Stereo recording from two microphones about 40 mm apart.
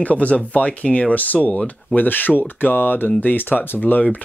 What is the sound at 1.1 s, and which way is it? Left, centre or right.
Speech, left.